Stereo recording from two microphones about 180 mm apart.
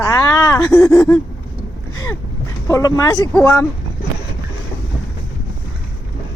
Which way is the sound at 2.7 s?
20° left (ahead or behind).